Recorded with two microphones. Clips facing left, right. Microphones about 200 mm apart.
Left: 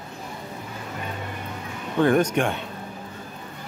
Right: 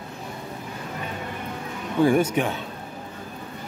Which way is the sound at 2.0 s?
10° right (ahead or behind).